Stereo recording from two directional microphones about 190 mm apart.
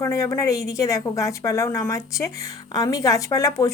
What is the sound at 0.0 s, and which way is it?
Speech, 15° left (ahead or behind).